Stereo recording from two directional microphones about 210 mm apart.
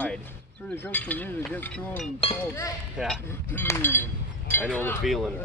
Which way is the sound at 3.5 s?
10° left (ahead or behind).